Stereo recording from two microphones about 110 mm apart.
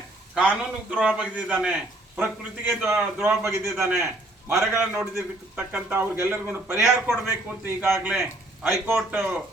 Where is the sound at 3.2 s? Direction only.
25° right (ahead or behind).